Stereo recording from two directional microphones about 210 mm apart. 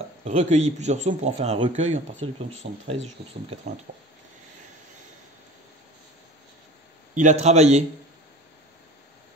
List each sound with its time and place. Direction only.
0.2 s a man's voice: 30° right (ahead or behind)
7.2 s a man's voice: 35° right (ahead or behind)